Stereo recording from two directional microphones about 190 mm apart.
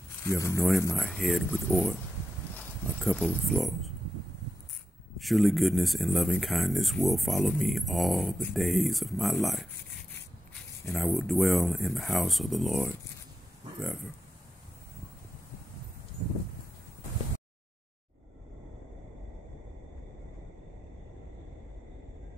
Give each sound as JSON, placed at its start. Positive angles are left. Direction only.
{"t": 0.2, "sound": "speech", "side_deg": 15}
{"t": 0.9, "sound": "speech", "side_deg": 0}
{"t": 5.1, "sound": "speech", "side_deg": 0}